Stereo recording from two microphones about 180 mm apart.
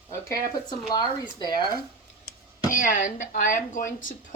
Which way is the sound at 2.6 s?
50° left (ahead or behind).